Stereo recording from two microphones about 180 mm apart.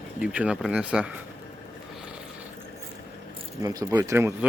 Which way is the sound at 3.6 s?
20° right (ahead or behind).